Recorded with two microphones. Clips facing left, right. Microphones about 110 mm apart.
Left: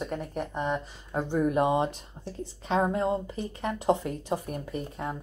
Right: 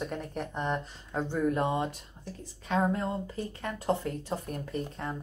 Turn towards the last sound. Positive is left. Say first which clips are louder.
# left 1 dB
turn(degrees=10)  # may be behind; listen again after turning